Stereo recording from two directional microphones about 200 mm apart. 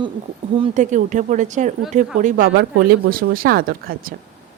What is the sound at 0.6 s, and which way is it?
Speech, 35° right (ahead or behind).